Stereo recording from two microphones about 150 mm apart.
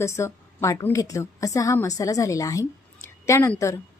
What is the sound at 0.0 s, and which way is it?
A woman's voice, 15° left (ahead or behind).